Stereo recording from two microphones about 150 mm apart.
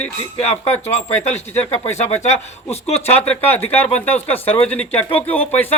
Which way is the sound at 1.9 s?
50° left (ahead or behind).